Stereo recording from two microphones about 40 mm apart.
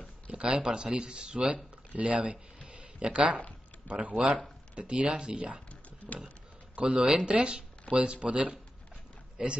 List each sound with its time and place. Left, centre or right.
0.3 s speech: right
2.0 s speech: right
2.7 s a sound: right
3.8 s speech: right
6.8 s a man's voice: right